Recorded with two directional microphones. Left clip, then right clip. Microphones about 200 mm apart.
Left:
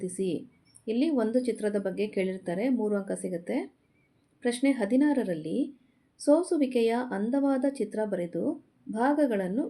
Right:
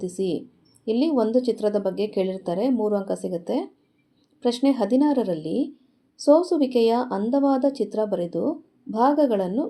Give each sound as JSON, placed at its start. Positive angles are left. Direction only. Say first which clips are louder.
{"t": 0.0, "sound": "speech", "louder": "right 5 dB", "side_deg": -15}